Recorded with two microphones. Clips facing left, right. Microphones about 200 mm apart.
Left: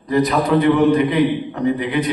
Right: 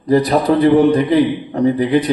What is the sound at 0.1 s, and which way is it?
A man's voice, 35° right (ahead or behind).